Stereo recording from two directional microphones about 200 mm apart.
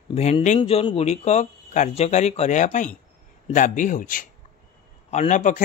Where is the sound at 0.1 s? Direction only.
35° left (ahead or behind).